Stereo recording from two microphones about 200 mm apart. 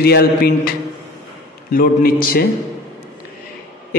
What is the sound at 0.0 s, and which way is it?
Speech, 50° left (ahead or behind).